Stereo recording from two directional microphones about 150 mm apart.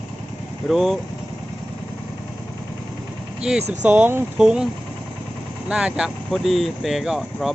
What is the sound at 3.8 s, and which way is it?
Speech, 10° right (ahead or behind).